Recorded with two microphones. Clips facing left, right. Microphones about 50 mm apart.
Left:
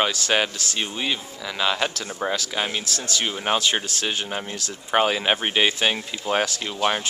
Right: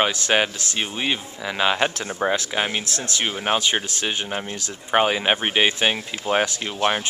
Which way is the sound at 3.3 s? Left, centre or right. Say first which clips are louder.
Right 1 dB; centre.